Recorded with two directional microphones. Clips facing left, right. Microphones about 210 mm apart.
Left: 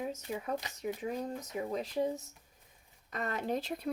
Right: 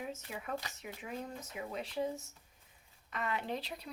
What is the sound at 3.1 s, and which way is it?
Speech, 40° left (ahead or behind).